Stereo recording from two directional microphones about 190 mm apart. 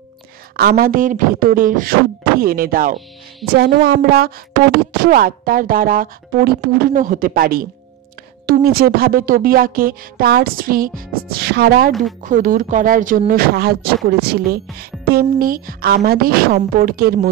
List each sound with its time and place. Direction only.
0.6 s speech: 50° right (ahead or behind)
12.2 s speech: 45° right (ahead or behind)